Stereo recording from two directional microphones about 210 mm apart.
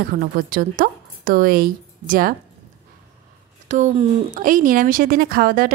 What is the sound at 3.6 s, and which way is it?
Speech, 35° right (ahead or behind).